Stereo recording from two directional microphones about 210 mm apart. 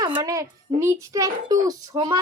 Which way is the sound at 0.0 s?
20° right (ahead or behind).